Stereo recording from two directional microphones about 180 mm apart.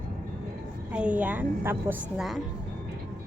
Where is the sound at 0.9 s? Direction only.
5° right (ahead or behind).